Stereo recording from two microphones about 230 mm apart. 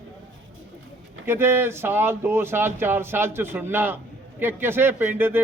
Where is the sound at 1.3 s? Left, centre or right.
Centre.